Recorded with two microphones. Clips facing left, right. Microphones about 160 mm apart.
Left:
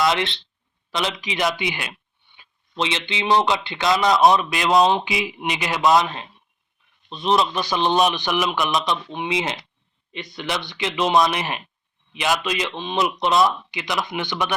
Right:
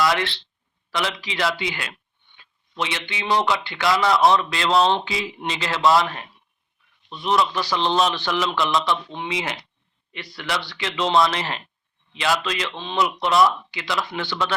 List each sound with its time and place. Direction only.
0.0 s a man's voice: 20° left (ahead or behind)